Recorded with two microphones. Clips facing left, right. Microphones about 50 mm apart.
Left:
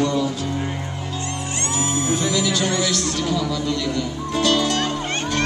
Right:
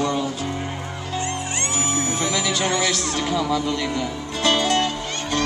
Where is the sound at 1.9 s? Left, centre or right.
Right.